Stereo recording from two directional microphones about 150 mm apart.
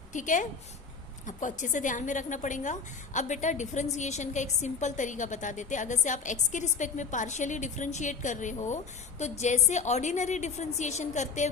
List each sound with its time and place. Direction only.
0.1 s a woman's voice: 60° left (ahead or behind)